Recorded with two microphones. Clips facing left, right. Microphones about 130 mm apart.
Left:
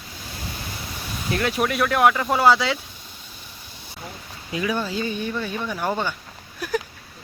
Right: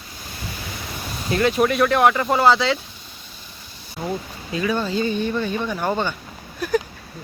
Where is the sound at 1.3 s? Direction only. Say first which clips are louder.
Right 5 dB; centre (ahead or behind).